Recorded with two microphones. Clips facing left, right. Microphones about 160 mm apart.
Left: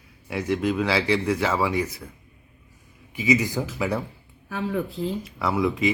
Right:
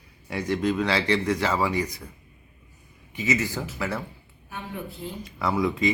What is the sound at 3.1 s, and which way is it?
Speech, 10° left (ahead or behind).